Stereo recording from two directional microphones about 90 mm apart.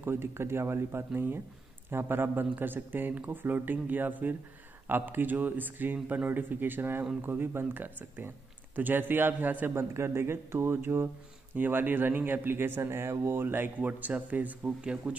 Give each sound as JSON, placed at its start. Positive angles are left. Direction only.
{"t": 0.0, "sound": "speech", "side_deg": -25}